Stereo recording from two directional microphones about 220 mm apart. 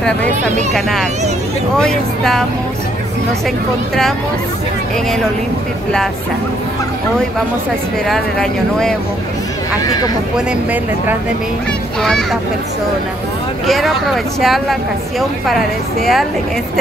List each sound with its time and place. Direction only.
0.7 s speech: centre (ahead or behind)
8.1 s speech: centre (ahead or behind)
9.8 s speech: 15° left (ahead or behind)
10.3 s speech: 5° right (ahead or behind)
13.7 s speech: centre (ahead or behind)